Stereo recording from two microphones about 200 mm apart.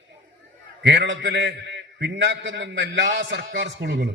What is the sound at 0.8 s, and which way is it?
A man's voice, 60° right (ahead or behind).